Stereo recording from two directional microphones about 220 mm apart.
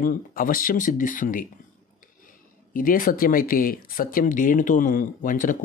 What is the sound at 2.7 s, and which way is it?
Speech, 40° left (ahead or behind).